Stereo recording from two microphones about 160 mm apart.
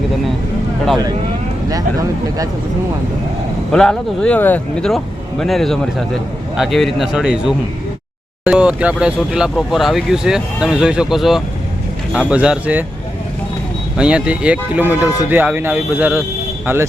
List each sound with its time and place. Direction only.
1.7 s speech: 20° right (ahead or behind)
3.7 s speech: 5° left (ahead or behind)
13.9 s speech: 5° right (ahead or behind)